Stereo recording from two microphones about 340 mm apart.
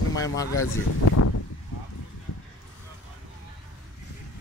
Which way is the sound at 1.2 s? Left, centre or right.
Left.